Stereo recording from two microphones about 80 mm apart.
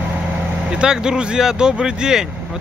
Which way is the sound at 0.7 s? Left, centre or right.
Centre.